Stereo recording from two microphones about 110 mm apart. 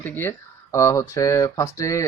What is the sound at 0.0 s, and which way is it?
Speech, 20° left (ahead or behind).